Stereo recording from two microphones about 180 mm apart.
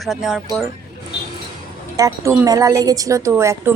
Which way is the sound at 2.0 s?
15° right (ahead or behind).